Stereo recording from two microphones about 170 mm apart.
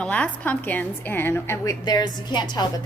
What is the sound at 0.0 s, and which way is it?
A woman's voice, 10° left (ahead or behind).